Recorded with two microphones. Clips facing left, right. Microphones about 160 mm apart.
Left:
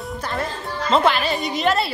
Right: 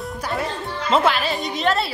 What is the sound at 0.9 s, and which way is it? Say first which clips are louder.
Speech: left 1 dB; 5° right (ahead or behind).